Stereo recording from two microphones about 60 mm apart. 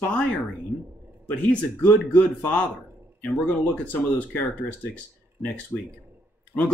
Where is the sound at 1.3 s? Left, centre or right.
Left.